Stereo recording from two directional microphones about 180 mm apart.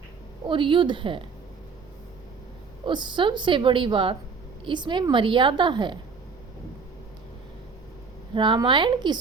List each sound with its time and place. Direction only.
0.4 s a woman's voice: 25° right (ahead or behind)
2.8 s a woman's voice: 25° right (ahead or behind)
8.4 s a woman's voice: 25° right (ahead or behind)